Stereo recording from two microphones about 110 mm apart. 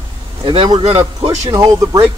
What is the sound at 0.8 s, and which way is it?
Speech, 65° right (ahead or behind).